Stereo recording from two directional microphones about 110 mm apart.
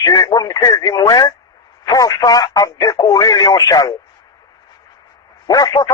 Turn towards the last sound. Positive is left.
turn(degrees=35)  # may be behind; listen again after turning